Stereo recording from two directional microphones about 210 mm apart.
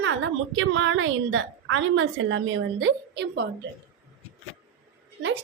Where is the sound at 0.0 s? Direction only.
65° right (ahead or behind).